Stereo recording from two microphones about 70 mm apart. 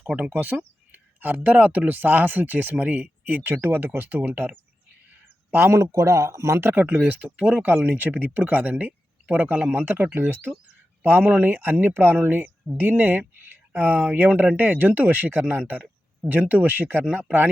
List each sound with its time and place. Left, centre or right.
0.3 s a man's voice: right